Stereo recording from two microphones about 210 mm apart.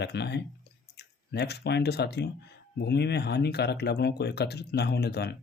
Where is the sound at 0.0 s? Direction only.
55° left (ahead or behind).